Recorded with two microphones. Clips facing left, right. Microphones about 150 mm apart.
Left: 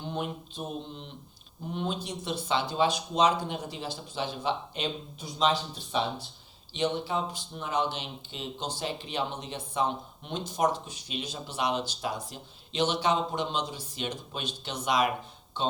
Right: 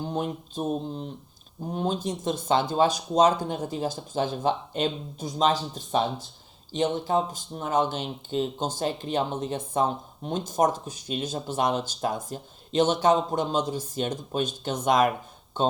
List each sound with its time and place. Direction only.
0.0 s speech: 40° right (ahead or behind)